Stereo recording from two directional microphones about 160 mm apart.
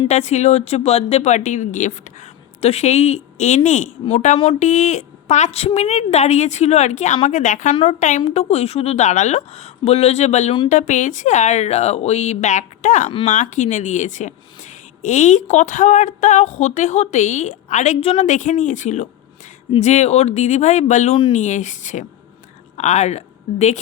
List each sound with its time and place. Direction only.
0.1 s a woman's voice: 45° left (ahead or behind)
21.3 s a woman's voice: 50° left (ahead or behind)